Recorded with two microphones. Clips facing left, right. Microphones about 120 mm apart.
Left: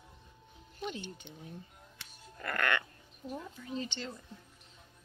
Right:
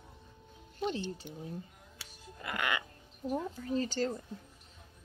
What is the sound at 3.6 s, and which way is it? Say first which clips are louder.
Speech: right 7 dB; 40° right (ahead or behind).